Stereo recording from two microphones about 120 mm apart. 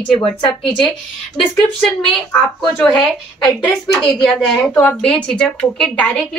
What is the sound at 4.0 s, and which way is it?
A woman's voice, 5° left (ahead or behind).